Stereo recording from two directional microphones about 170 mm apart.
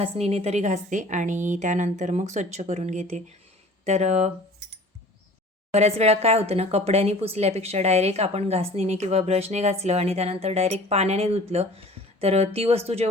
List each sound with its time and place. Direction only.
0.0 s a woman's voice: 35° right (ahead or behind)
5.7 s speech: 40° right (ahead or behind)